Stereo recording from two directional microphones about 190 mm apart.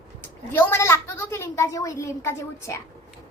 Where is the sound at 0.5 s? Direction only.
15° left (ahead or behind).